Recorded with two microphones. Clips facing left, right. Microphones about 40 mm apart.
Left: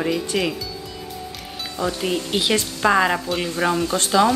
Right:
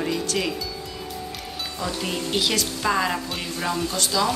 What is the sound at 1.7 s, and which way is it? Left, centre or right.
Speech, centre.